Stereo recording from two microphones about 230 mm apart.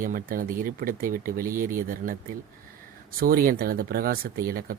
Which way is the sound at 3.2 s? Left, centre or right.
Right.